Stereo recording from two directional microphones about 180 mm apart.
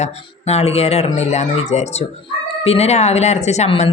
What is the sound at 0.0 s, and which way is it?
Speech, 35° left (ahead or behind).